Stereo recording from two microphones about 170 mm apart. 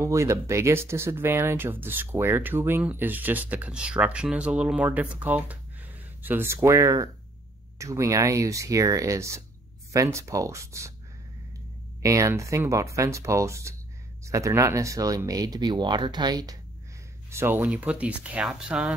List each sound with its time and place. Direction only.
0.0 s speech: 15° right (ahead or behind)
12.0 s speech: 20° right (ahead or behind)